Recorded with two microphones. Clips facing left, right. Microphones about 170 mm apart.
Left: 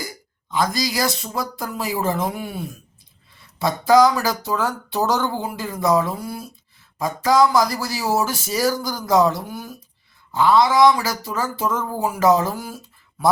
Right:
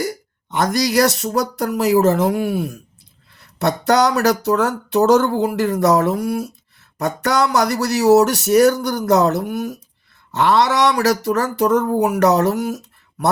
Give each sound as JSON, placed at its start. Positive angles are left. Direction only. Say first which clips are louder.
{"t": 0.0, "sound": "speech", "louder": "right 10 dB", "side_deg": -65}
{"t": 10.3, "sound": "speech", "louder": "even", "side_deg": -75}